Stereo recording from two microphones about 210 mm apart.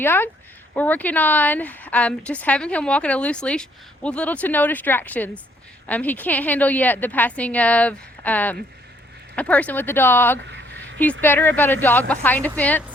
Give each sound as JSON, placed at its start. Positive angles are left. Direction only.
{"t": 0.0, "sound": "a woman's voice", "side_deg": 10}
{"t": 10.4, "sound": "a sound", "side_deg": -55}
{"t": 11.0, "sound": "a woman's voice", "side_deg": 10}